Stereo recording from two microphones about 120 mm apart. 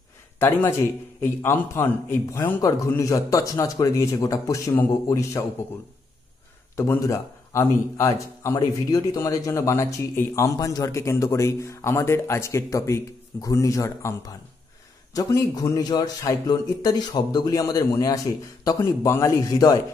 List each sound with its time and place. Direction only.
0.4 s a man's voice: 20° left (ahead or behind)
6.8 s a man's voice: 25° left (ahead or behind)